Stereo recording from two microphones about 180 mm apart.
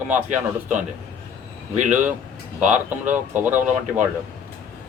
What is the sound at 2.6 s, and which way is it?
A man's voice, 10° right (ahead or behind).